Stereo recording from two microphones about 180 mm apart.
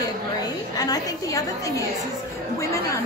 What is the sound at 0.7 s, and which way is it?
Speech, 20° left (ahead or behind).